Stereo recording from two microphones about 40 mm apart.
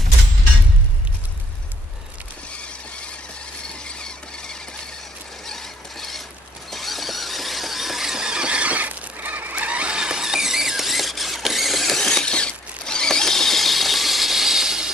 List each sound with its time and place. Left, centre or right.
3.8 s squeal: left
5.5 s mechanisms: centre
6.7 s squeal: centre
8.4 s squeal: right
10.0 s squeal: centre
11.9 s mechanisms: centre